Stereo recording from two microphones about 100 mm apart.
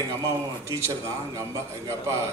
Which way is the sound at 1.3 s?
30° right (ahead or behind).